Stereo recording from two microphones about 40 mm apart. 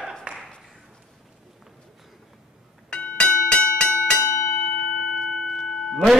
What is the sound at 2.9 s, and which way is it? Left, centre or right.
Music, left.